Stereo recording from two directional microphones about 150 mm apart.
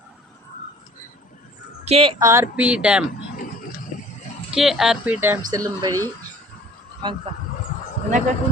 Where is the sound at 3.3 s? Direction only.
75° left (ahead or behind).